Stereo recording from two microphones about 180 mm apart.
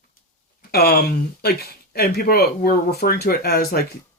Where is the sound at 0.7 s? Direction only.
60° left (ahead or behind).